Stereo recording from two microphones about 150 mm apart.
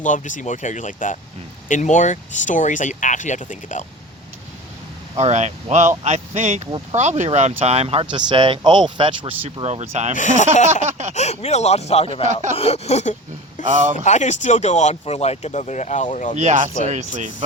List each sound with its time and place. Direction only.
0.0 s speech: 55° left (ahead or behind)
5.1 s speech: 50° right (ahead or behind)
8.1 s speech: 35° right (ahead or behind); by 10.2 s 50° right (ahead or behind)
10.2 s speech: 55° left (ahead or behind)
10.8 s a sound: 50° right (ahead or behind)
11.1 s speech: 45° left (ahead or behind)
12.3 s speech: 55° right (ahead or behind)
12.5 s speech: 40° left (ahead or behind)
13.7 s speech: 55° right (ahead or behind)
14.0 s speech: 50° left (ahead or behind)
16.4 s speech: 50° right (ahead or behind)